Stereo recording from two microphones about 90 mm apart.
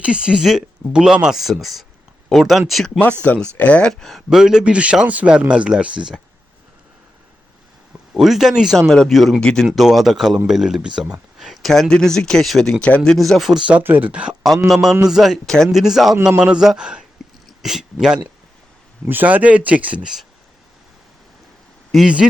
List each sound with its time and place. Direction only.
0.0 s speech: 10° right (ahead or behind)
3.0 s speech: 15° left (ahead or behind); by 6.1 s 10° right (ahead or behind)
8.1 s speech: 5° right (ahead or behind)
14.7 s speech: centre (ahead or behind)
19.0 s speech: 20° right (ahead or behind)
21.9 s speech: 10° right (ahead or behind)